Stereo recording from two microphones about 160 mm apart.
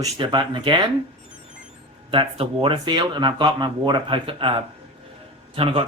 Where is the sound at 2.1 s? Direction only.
35° right (ahead or behind).